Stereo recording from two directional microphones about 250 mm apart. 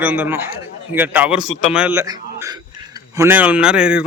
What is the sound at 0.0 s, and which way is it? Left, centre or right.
A man's voice, centre.